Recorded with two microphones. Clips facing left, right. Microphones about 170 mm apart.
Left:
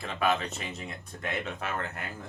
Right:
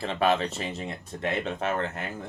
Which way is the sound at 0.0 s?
30° right (ahead or behind).